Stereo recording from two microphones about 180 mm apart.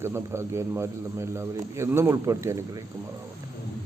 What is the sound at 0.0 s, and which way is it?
A man's voice, 15° right (ahead or behind).